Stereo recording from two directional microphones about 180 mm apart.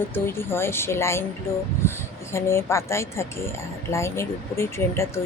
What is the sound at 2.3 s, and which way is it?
Speech, 15° left (ahead or behind).